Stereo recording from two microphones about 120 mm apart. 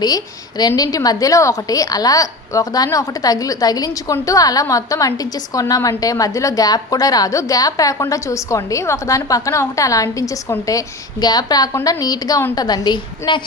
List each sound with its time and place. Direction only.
0.0 s a woman's voice: 35° left (ahead or behind)